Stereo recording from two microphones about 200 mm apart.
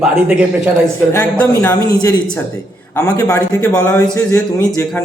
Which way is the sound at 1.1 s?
10° left (ahead or behind).